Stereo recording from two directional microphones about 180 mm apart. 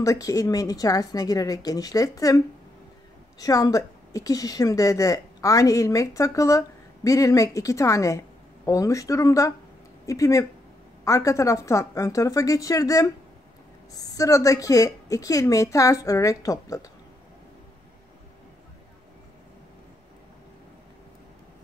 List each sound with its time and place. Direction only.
0.0 s a woman's voice: 20° left (ahead or behind)